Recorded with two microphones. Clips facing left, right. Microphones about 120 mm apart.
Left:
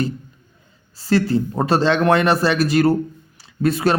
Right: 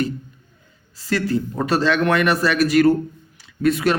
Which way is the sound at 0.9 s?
30° left (ahead or behind).